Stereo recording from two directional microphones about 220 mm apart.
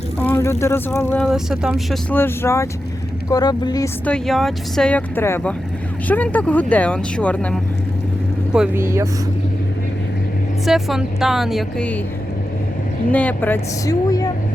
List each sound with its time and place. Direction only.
0.2 s vehicle: 10° left (ahead or behind)
0.6 s speech: 10° left (ahead or behind)
4.0 s speech: 5° left (ahead or behind)
8.5 s speech: 5° right (ahead or behind)
10.7 s speech: centre (ahead or behind)
13.1 s speech: 5° left (ahead or behind)